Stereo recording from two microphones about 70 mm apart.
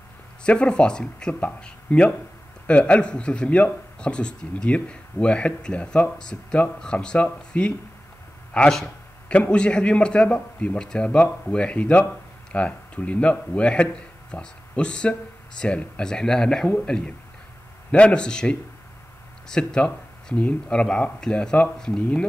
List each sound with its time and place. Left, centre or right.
0.4 s a man's voice: centre